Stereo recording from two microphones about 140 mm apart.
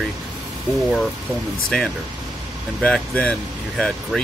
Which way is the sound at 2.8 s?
10° left (ahead or behind).